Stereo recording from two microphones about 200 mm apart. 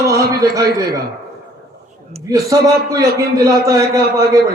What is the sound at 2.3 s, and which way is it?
A man's voice, 15° right (ahead or behind).